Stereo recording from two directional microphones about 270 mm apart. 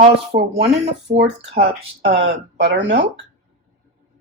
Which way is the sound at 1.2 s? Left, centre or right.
Right.